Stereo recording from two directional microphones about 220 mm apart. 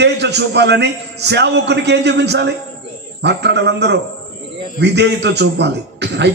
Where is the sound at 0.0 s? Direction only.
50° right (ahead or behind).